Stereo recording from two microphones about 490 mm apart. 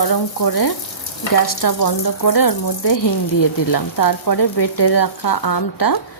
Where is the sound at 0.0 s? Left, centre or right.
Left.